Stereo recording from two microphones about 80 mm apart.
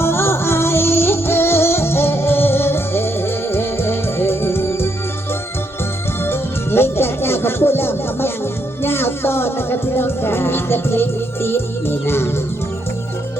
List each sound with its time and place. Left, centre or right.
0.0 s music: left
6.2 s music: left